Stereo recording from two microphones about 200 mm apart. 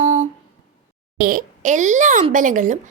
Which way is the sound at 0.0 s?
35° right (ahead or behind).